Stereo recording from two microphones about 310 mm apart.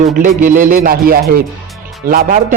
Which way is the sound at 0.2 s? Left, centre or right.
Right.